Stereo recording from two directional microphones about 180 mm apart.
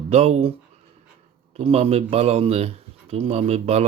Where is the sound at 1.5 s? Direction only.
35° right (ahead or behind).